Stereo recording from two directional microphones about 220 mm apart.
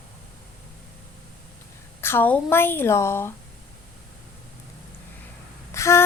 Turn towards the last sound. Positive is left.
turn(degrees=15)  # may be behind; listen again after turning